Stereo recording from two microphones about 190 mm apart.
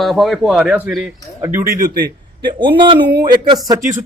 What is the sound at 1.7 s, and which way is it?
Speech, 50° right (ahead or behind).